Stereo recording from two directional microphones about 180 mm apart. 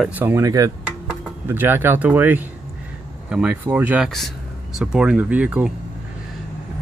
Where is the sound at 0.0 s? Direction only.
10° right (ahead or behind).